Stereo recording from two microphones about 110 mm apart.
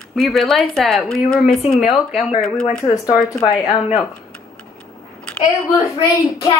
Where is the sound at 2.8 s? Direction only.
30° left (ahead or behind).